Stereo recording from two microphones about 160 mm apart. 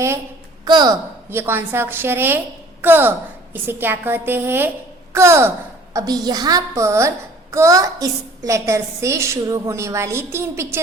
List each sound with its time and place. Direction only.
0.6 s a woman's voice: 25° right (ahead or behind)
1.3 s a woman's voice: 15° right (ahead or behind)